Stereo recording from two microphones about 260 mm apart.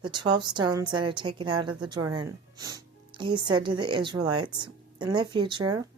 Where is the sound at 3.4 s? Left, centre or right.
Centre.